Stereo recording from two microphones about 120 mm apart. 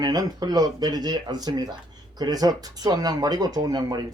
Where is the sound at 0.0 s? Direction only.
35° right (ahead or behind).